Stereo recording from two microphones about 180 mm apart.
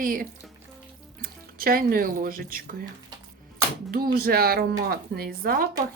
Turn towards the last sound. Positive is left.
turn(degrees=-55)  # may be behind; listen again after turning